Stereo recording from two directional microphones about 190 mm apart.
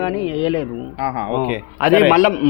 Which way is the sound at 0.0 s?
25° left (ahead or behind).